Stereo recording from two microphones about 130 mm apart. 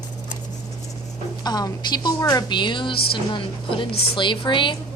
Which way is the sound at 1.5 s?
30° left (ahead or behind).